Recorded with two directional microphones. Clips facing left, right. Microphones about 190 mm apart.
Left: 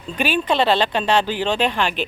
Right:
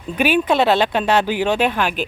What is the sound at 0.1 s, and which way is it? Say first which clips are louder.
Speech: right 4 dB; 10° right (ahead or behind).